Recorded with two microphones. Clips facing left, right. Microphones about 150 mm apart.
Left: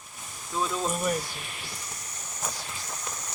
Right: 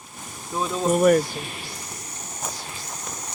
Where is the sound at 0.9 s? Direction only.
65° right (ahead or behind).